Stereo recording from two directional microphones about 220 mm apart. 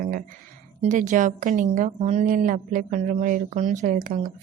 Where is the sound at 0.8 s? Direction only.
35° right (ahead or behind).